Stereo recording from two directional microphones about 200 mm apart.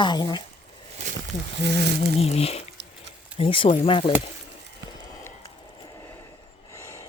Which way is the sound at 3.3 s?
30° left (ahead or behind).